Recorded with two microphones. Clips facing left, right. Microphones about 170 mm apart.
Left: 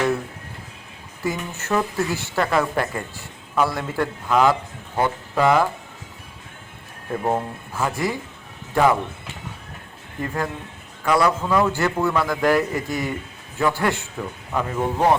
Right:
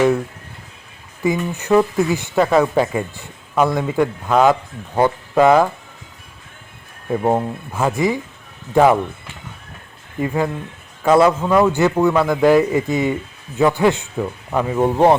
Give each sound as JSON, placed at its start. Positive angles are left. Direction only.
{"t": 1.2, "sound": "a man's voice", "side_deg": -15}
{"t": 7.3, "sound": "a man's voice", "side_deg": -20}
{"t": 10.2, "sound": "speech", "side_deg": -10}
{"t": 11.0, "sound": "a man's voice", "side_deg": -25}